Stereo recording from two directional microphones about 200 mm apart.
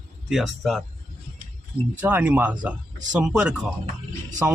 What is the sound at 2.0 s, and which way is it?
Speech, 10° right (ahead or behind).